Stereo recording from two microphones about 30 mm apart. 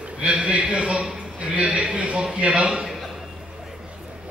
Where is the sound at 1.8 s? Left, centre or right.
Right.